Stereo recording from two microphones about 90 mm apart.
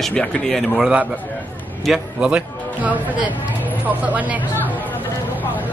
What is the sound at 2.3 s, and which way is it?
Speech, 15° right (ahead or behind).